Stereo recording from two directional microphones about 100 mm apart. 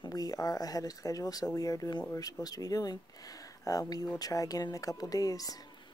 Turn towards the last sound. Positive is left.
turn(degrees=35)  # may be behind; listen again after turning